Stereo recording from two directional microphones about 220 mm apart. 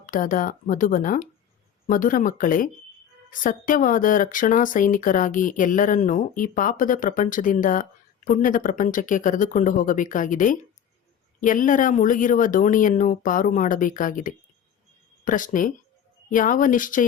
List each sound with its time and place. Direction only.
0.0 s speech: 40° left (ahead or behind)